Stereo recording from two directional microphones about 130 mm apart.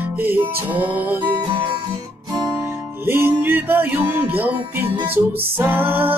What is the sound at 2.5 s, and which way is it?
Music, 15° right (ahead or behind).